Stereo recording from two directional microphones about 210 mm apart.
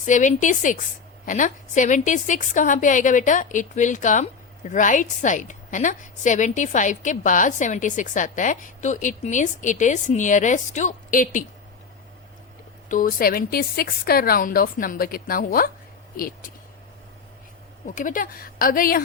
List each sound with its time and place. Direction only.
0.0 s a woman's voice: 35° left (ahead or behind)
12.9 s speech: 40° left (ahead or behind)
17.8 s a woman's voice: 40° left (ahead or behind)